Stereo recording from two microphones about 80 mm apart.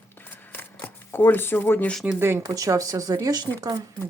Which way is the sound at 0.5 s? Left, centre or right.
Left.